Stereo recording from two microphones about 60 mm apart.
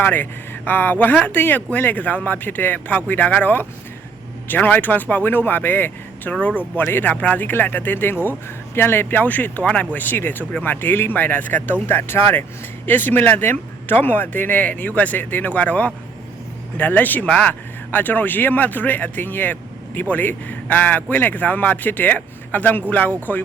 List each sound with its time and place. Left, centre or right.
0.0 s speech: left
17.2 s speech: centre
17.9 s speech: left